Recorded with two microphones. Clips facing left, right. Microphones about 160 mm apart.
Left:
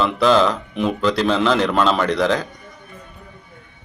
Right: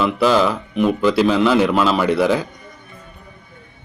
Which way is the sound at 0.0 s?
5° right (ahead or behind).